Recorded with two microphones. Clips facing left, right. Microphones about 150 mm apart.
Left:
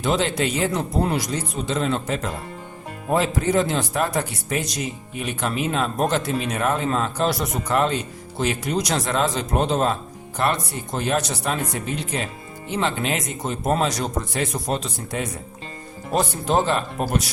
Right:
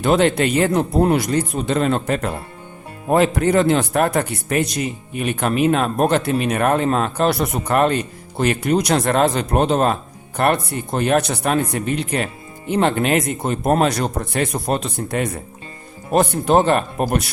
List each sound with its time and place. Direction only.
0.0 s speech: 60° right (ahead or behind)